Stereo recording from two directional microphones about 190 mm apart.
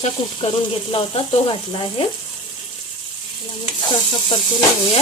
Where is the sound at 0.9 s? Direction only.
30° left (ahead or behind).